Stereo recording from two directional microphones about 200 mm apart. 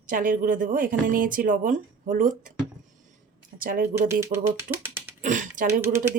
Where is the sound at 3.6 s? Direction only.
45° right (ahead or behind).